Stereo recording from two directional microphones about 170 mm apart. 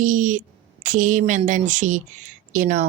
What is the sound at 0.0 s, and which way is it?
A woman's voice, 50° right (ahead or behind).